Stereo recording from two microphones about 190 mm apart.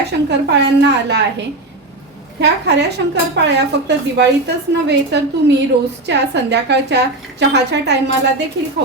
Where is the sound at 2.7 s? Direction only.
65° right (ahead or behind).